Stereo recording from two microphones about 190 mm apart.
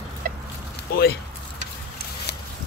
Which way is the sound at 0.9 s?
55° left (ahead or behind).